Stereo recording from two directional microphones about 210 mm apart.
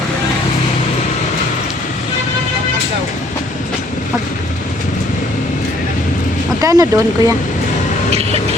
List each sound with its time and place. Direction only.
6.6 s speech: 15° right (ahead or behind)